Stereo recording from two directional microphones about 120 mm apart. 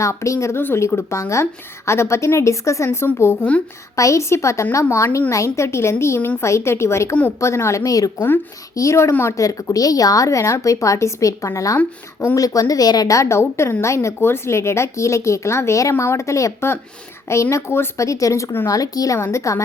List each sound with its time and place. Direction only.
0.0 s a woman's voice: 25° left (ahead or behind)
3.9 s a woman's voice: 25° left (ahead or behind)